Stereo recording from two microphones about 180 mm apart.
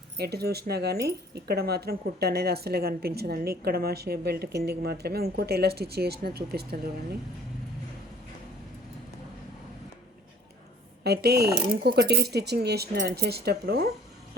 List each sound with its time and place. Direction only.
0.2 s speech: 60° right (ahead or behind)
11.0 s speech: 65° right (ahead or behind)